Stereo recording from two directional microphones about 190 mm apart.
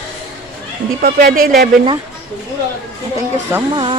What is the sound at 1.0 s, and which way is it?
Speech, 50° right (ahead or behind).